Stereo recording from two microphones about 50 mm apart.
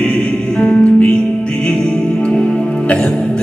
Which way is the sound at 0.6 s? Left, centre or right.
Left.